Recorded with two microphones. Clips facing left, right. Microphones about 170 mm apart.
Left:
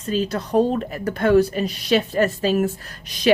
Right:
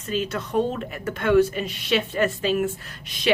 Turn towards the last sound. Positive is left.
turn(degrees=40)  # may be behind; listen again after turning